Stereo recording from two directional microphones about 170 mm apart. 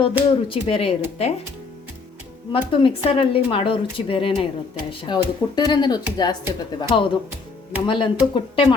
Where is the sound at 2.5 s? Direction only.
30° left (ahead or behind).